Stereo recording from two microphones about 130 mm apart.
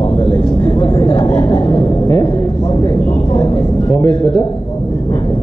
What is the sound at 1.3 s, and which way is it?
Speech, 10° left (ahead or behind).